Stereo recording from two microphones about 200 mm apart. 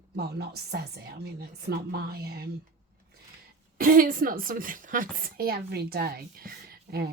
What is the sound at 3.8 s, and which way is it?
A woman's voice, 45° right (ahead or behind).